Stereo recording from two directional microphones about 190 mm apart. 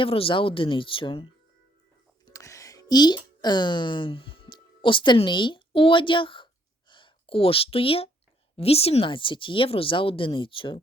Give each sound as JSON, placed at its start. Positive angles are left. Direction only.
{"t": 0.0, "sound": "speech", "side_deg": 30}
{"t": 2.3, "sound": "a sound", "side_deg": 15}
{"t": 8.5, "sound": "speech", "side_deg": 30}